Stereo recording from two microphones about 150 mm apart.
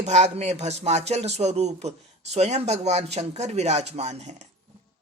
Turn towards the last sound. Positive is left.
turn(degrees=-50)  # may be behind; listen again after turning